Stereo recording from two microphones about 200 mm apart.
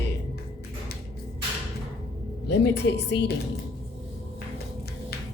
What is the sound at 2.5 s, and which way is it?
Speech, 55° left (ahead or behind).